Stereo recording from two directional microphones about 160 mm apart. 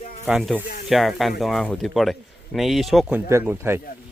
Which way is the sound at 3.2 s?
15° right (ahead or behind).